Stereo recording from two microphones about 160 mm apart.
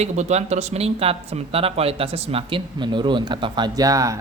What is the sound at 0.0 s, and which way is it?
Speech, 45° right (ahead or behind).